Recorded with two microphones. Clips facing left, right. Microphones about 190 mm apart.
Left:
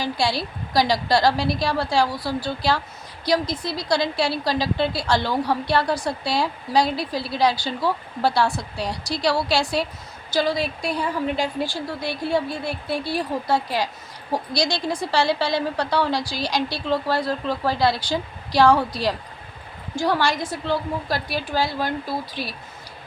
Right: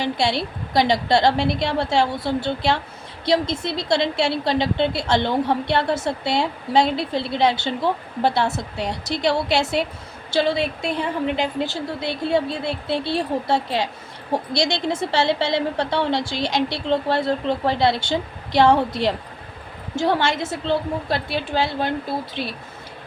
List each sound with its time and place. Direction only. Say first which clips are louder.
0.0 s a woman's voice: right 2 dB; 25° right (ahead or behind)